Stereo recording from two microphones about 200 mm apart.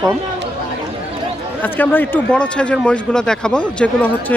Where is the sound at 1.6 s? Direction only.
10° left (ahead or behind).